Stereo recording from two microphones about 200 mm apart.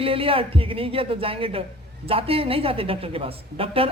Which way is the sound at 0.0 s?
25° right (ahead or behind).